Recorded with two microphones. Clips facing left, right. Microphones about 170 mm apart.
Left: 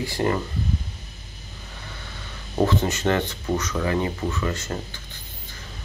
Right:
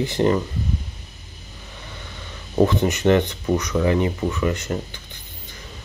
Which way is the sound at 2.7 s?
15° right (ahead or behind).